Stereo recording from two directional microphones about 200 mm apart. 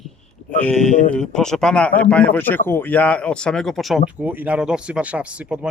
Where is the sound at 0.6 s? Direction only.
5° left (ahead or behind).